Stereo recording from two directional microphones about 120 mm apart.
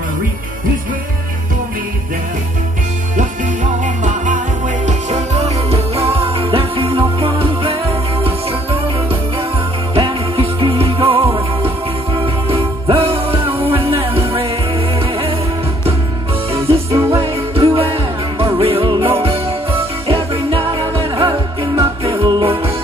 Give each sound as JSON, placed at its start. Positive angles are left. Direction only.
{"t": 3.8, "sound": "music", "side_deg": -90}
{"t": 4.8, "sound": "music", "side_deg": -65}
{"t": 9.9, "sound": "music", "side_deg": -50}
{"t": 16.6, "sound": "music", "side_deg": -25}
{"t": 17.2, "sound": "music", "side_deg": -50}